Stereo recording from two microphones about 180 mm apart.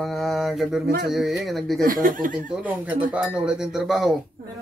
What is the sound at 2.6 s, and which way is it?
Speech, 10° right (ahead or behind).